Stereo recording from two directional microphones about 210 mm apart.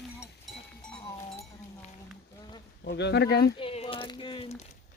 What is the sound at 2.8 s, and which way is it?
Speech, 55° left (ahead or behind).